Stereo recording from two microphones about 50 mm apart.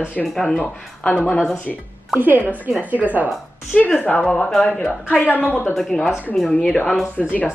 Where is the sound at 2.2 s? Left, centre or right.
Right.